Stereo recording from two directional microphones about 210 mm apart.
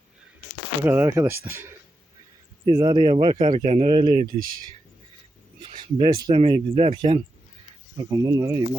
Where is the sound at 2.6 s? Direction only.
20° right (ahead or behind).